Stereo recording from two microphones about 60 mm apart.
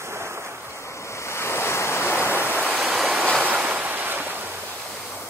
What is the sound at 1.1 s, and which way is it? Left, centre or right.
Waves, left.